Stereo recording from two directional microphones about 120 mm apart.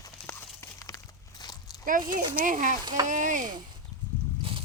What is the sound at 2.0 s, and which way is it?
Speech, 40° right (ahead or behind).